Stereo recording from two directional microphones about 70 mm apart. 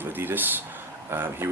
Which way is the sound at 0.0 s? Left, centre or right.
Right.